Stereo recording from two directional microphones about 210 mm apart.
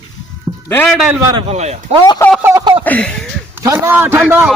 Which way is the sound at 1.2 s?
20° right (ahead or behind).